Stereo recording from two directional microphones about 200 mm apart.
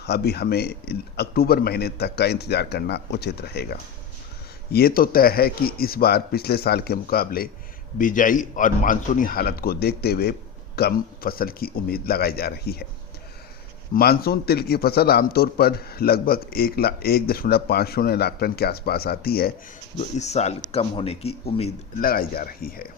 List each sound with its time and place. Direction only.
0.0 s a man's voice: 55° left (ahead or behind)
13.9 s a man's voice: 50° left (ahead or behind)
20.0 s speech: 35° left (ahead or behind)
22.0 s a man's voice: 45° left (ahead or behind)